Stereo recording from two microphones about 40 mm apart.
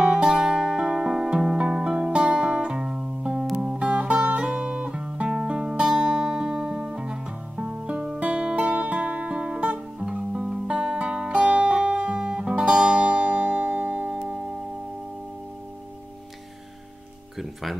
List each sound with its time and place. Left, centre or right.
0.0 s music: right
1.6 s music: right
17.4 s music: centre